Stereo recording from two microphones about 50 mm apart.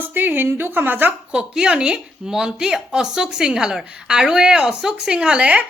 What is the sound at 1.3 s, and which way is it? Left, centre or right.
A woman's voice, centre.